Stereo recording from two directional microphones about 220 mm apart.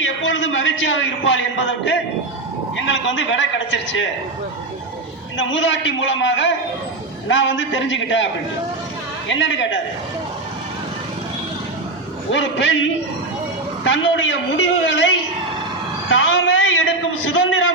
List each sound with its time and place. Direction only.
0.2 s a man's voice: 60° left (ahead or behind)
5.4 s a man's voice: 55° left (ahead or behind)
12.3 s a man's voice: 55° left (ahead or behind)